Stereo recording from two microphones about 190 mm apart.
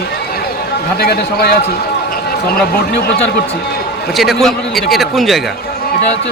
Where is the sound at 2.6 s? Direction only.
55° left (ahead or behind).